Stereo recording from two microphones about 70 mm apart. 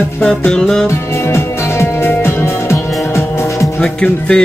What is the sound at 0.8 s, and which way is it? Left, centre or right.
Music, left.